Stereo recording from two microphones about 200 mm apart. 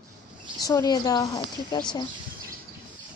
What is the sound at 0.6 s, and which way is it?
Speech, 20° left (ahead or behind).